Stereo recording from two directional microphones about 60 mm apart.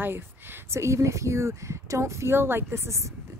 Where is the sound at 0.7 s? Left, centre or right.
Right.